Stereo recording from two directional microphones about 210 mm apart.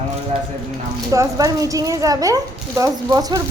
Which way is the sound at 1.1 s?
15° right (ahead or behind).